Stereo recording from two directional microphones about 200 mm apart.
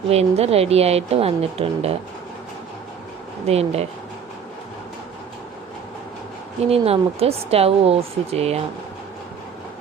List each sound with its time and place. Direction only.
0.1 s a woman's voice: 30° right (ahead or behind)
3.4 s a woman's voice: 30° right (ahead or behind)
6.7 s speech: 30° right (ahead or behind)